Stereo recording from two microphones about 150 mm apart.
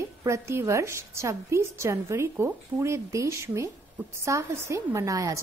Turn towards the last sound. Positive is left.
turn(degrees=-20)  # may be behind; listen again after turning